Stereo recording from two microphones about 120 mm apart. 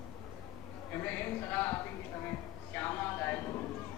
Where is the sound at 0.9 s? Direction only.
15° left (ahead or behind).